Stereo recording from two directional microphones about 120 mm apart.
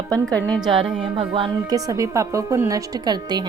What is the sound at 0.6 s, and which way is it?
Speech, 45° right (ahead or behind).